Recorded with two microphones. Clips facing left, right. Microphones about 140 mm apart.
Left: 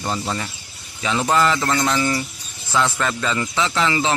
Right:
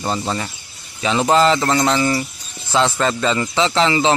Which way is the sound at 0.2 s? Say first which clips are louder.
Right 3 dB; 35° right (ahead or behind).